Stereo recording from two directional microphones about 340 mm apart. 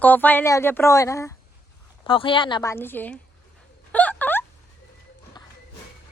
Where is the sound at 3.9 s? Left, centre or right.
Centre.